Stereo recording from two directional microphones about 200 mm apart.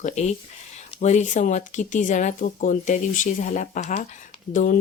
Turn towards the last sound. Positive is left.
turn(degrees=40)  # may be behind; listen again after turning